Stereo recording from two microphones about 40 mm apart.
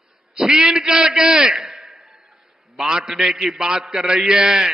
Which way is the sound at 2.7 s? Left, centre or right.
Centre.